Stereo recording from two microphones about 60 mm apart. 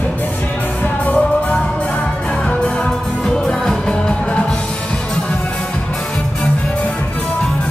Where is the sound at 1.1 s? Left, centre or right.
Centre.